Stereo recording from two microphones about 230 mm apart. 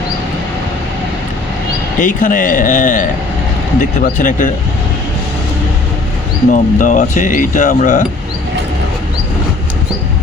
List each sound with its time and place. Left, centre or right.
2.0 s speech: left
6.5 s speech: left